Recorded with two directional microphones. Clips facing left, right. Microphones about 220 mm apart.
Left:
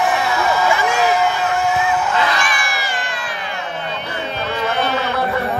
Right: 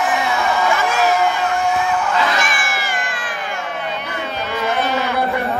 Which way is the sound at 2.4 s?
50° right (ahead or behind).